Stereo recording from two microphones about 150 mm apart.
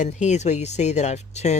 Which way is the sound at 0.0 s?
50° left (ahead or behind).